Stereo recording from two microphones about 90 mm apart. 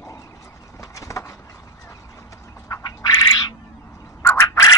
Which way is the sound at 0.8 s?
35° left (ahead or behind).